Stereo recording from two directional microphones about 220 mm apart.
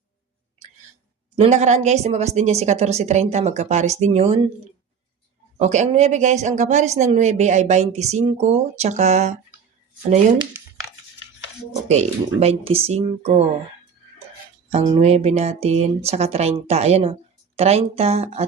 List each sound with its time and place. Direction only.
1.4 s speech: 30° right (ahead or behind)
5.5 s speech: 30° right (ahead or behind)
11.9 s speech: 30° right (ahead or behind)
14.7 s speech: 25° right (ahead or behind)